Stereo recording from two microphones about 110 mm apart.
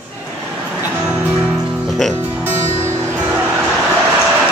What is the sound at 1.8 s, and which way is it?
Music, centre (ahead or behind).